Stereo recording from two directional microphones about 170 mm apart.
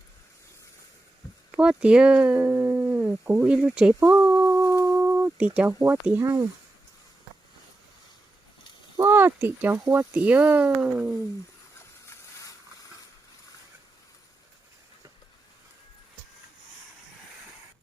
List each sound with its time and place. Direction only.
1.5 s speech: 5° right (ahead or behind)
9.0 s speech: 15° right (ahead or behind)
12.0 s mechanisms: 20° left (ahead or behind)